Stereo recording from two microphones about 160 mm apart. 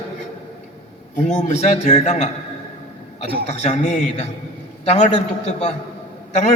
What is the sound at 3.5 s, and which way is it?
Speech, 45° left (ahead or behind).